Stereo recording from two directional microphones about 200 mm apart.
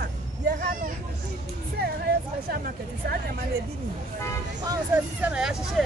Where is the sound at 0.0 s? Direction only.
55° right (ahead or behind).